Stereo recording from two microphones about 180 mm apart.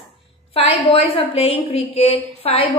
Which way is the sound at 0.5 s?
30° left (ahead or behind).